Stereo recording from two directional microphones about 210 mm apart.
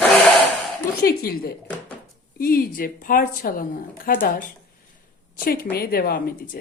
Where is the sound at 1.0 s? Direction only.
45° left (ahead or behind).